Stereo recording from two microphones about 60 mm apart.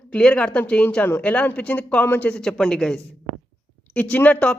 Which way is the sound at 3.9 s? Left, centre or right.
Left.